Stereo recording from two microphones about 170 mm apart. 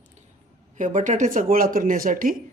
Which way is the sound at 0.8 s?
45° right (ahead or behind).